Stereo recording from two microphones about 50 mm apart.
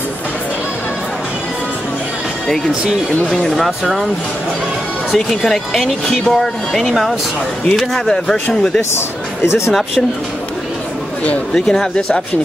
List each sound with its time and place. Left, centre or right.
3.4 s speech: centre
5.1 s speech: centre
8.9 s speech: left
9.7 s speech: centre
11.5 s speech: centre